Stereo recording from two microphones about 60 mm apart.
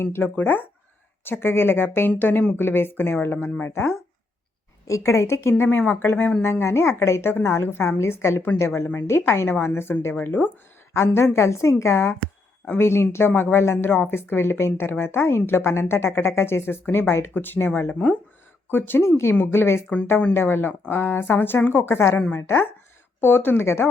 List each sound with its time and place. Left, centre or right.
0.0 s a woman's voice: left
0.3 s a woman's voice: left
4.9 s a woman's voice: left
5.6 s a woman's voice: left
6.4 s a woman's voice: left
18.7 s a woman's voice: left